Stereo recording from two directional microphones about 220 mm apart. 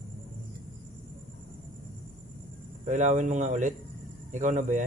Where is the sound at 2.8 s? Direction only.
30° right (ahead or behind).